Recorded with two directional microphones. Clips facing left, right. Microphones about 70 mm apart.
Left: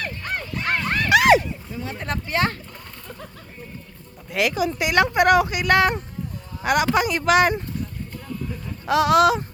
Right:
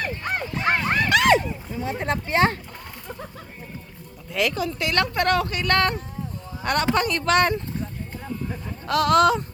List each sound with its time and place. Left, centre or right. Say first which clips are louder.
0.0 s goose: right 2 dB; centre
1.1 s a sound: left 4 dB; centre
1.7 s speech: right 4 dB; right
4.3 s a woman's voice: left 2 dB; centre
8.9 s a woman's voice: left 1 dB; centre